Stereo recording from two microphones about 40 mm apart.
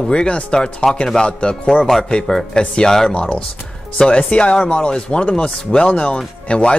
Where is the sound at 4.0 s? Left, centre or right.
Left.